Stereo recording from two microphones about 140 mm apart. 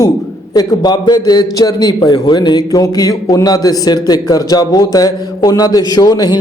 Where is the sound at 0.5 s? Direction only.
30° left (ahead or behind).